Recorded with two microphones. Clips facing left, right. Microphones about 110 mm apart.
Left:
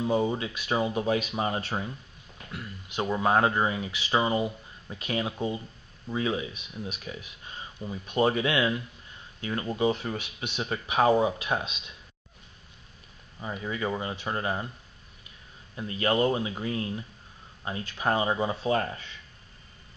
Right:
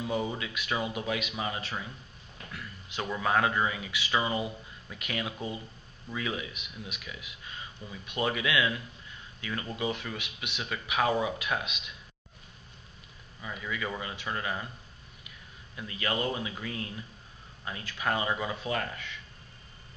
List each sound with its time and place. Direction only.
0.0 s speech: 30° left (ahead or behind)
13.4 s speech: 35° left (ahead or behind)